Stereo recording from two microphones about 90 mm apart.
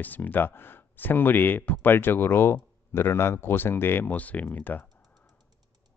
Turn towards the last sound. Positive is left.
turn(degrees=20)  # may be behind; listen again after turning